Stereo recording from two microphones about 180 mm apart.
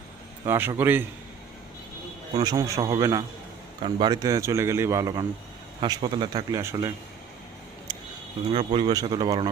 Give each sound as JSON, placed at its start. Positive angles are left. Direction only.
{"t": 0.4, "sound": "a man's voice", "side_deg": -10}
{"t": 2.4, "sound": "a man's voice", "side_deg": -20}
{"t": 8.5, "sound": "speech", "side_deg": -25}